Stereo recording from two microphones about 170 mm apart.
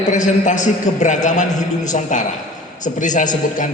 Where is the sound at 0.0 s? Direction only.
45° left (ahead or behind).